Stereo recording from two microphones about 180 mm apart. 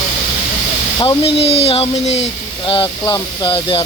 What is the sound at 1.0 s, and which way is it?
Speech, 30° left (ahead or behind).